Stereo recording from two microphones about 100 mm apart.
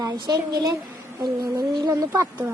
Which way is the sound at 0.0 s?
40° right (ahead or behind).